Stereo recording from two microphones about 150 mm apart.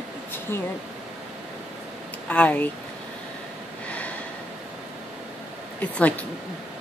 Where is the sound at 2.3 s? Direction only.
10° left (ahead or behind).